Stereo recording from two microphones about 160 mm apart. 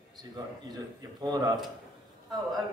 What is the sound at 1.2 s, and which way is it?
Speech, 25° right (ahead or behind).